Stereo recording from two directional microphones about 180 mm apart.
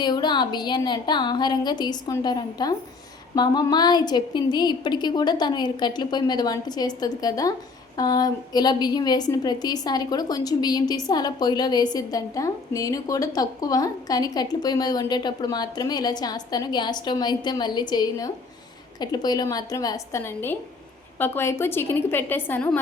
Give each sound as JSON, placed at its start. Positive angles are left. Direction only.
{"t": 0.0, "sound": "a woman's voice", "side_deg": 25}